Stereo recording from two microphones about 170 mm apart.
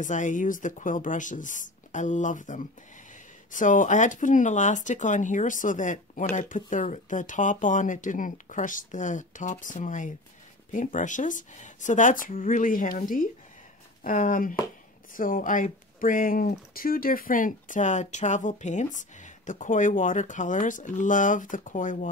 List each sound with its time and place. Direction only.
0.0 s speech: 50° left (ahead or behind)